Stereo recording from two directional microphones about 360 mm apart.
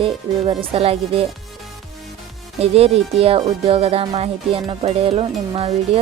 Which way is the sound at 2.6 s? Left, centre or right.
Centre.